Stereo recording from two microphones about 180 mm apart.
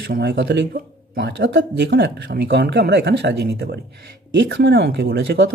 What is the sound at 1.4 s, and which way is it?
A woman's voice, 75° right (ahead or behind).